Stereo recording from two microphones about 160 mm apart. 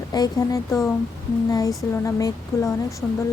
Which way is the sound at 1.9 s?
20° left (ahead or behind).